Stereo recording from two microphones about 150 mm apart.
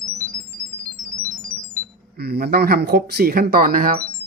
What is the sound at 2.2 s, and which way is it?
Speech, 90° right.